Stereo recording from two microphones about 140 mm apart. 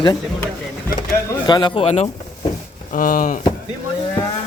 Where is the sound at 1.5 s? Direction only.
30° left (ahead or behind).